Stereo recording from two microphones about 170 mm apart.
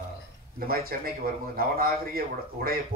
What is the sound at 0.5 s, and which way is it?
A man's voice, 60° right (ahead or behind).